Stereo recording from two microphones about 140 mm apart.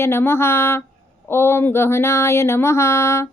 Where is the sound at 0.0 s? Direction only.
15° left (ahead or behind).